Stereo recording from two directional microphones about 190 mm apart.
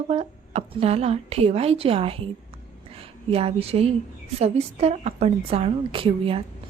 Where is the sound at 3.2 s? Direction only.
30° right (ahead or behind).